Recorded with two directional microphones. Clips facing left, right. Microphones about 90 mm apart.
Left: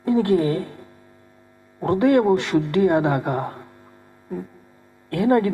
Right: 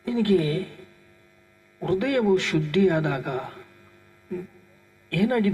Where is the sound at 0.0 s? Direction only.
35° left (ahead or behind).